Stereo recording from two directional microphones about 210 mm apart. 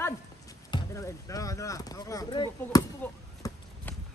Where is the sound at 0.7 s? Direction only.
15° left (ahead or behind).